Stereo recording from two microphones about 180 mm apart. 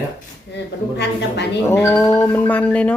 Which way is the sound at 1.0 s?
75° left (ahead or behind).